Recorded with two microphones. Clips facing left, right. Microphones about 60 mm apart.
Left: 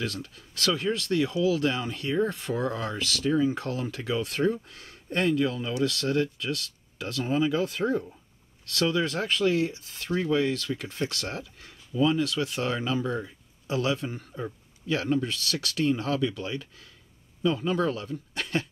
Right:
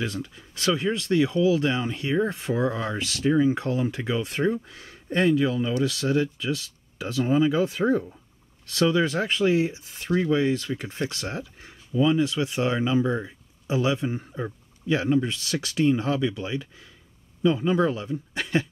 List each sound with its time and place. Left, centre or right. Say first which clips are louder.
0.0 s speech: right 3 dB; right